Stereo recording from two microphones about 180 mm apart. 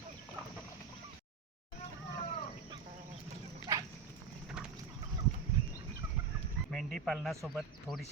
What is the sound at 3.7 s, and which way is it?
Dog, 20° right (ahead or behind).